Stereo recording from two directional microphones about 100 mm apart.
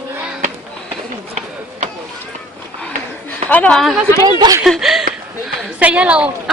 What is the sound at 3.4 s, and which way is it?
Speech, 15° left (ahead or behind).